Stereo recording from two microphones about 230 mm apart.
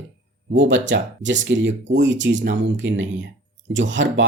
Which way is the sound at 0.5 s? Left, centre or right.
Right.